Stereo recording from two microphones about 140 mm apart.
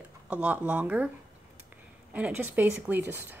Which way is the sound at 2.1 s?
10° right (ahead or behind).